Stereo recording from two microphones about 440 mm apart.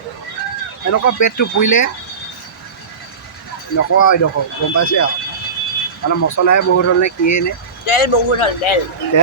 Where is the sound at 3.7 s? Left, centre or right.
Left.